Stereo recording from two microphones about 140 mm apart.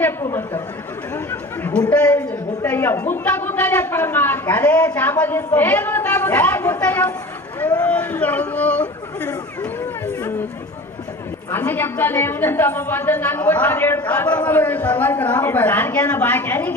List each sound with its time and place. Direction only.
0.3 s speech: 15° left (ahead or behind)
1.3 s chatter: 10° left (ahead or behind)
2.6 s a woman's voice: 15° left (ahead or behind)
7.6 s chatter: 10° left (ahead or behind)
11.5 s a woman's voice: 15° left (ahead or behind)